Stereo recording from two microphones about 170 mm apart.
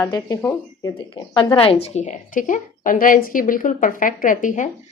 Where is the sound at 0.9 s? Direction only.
25° left (ahead or behind); by 4.6 s 50° left (ahead or behind).